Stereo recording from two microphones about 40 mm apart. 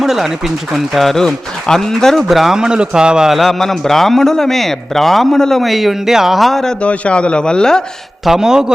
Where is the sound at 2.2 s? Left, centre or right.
Centre.